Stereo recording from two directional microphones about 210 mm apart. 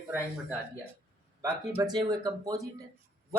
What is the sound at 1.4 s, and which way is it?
Speech, 15° right (ahead or behind).